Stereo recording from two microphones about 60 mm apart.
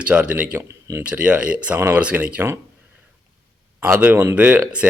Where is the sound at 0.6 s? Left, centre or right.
Right.